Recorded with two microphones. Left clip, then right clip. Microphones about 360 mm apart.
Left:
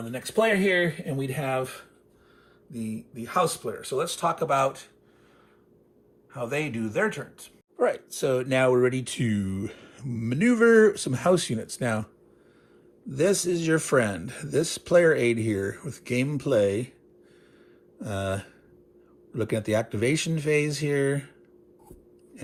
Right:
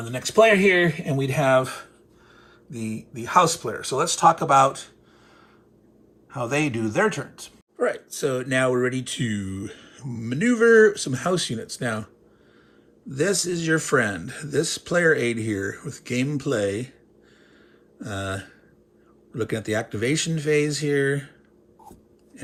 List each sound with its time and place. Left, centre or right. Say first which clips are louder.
0.6 s speech: right 5 dB; centre
2.6 s speech: right 3 dB; centre
6.3 s speech: right 5 dB; centre
7.8 s speech: right 1 dB; centre
13.1 s speech: even; centre
18.0 s speech: even; centre